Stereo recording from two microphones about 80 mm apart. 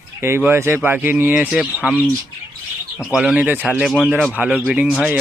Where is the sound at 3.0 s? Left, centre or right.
Centre.